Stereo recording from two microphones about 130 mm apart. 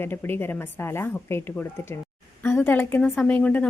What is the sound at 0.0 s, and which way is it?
A woman's voice, 15° left (ahead or behind).